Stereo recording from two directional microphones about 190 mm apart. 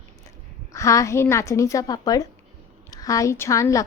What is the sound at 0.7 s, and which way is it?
A woman's voice, 15° left (ahead or behind).